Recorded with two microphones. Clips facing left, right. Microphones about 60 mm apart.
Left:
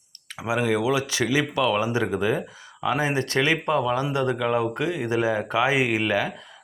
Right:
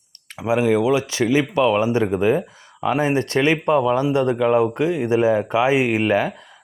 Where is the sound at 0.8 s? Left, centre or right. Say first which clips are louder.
Right 5 dB; right.